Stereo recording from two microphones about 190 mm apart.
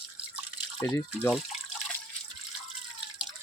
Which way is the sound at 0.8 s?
10° left (ahead or behind).